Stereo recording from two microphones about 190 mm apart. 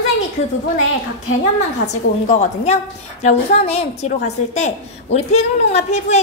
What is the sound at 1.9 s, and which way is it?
A woman's voice, 35° left (ahead or behind).